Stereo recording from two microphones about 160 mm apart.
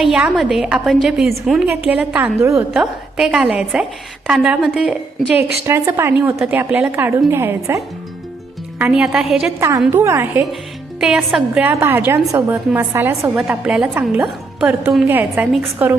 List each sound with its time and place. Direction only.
0.0 s a woman's voice: 5° right (ahead or behind)
5.3 s a woman's voice: 15° right (ahead or behind)
8.8 s a woman's voice: 5° right (ahead or behind)
9.6 s a woman's voice: 20° right (ahead or behind)
11.0 s a woman's voice: 5° right (ahead or behind)